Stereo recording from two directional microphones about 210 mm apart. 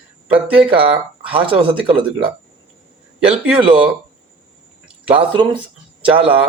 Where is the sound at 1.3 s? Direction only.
25° right (ahead or behind).